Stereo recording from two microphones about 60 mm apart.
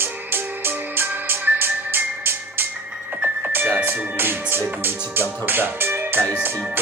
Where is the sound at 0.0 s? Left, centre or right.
Right.